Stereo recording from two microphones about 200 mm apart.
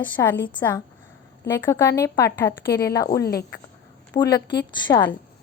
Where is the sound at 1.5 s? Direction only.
10° left (ahead or behind).